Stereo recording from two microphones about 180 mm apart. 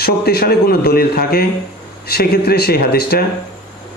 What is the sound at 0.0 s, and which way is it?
Speech, 60° left (ahead or behind).